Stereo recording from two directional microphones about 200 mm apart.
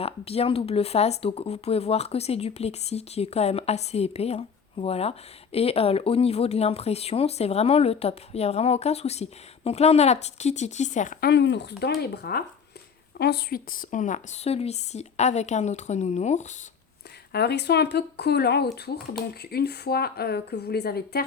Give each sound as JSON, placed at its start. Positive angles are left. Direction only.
{"t": 0.0, "sound": "speech", "side_deg": 30}
{"t": 11.3, "sound": "speech", "side_deg": 60}
{"t": 17.3, "sound": "speech", "side_deg": 55}